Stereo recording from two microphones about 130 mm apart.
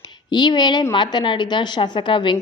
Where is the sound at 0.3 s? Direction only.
35° left (ahead or behind).